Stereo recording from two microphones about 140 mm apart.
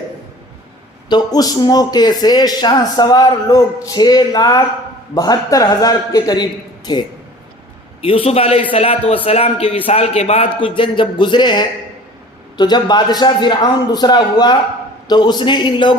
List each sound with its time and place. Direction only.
1.1 s speech: 25° left (ahead or behind)
8.0 s a man's voice: 40° left (ahead or behind)